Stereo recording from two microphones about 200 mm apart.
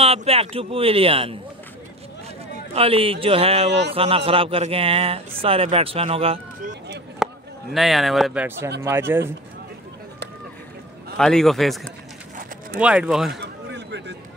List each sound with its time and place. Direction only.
0.0 s a man's voice: 30° right (ahead or behind)
2.7 s a man's voice: 30° right (ahead or behind)
7.2 s a sound: 5° right (ahead or behind)
7.7 s speech: centre (ahead or behind)
11.1 s speech: centre (ahead or behind)
13.3 s a sound: 55° right (ahead or behind)